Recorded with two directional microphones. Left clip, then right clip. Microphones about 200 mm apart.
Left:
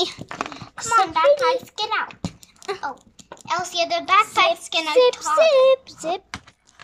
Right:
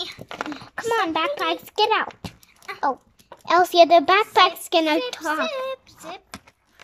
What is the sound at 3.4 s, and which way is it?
A child's voice, 40° right (ahead or behind).